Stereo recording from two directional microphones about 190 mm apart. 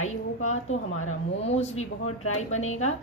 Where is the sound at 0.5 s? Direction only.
90° left.